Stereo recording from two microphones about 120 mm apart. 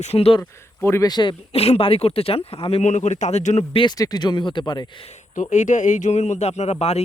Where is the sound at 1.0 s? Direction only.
40° left (ahead or behind).